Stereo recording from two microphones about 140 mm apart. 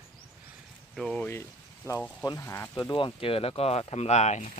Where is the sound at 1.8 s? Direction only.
20° left (ahead or behind).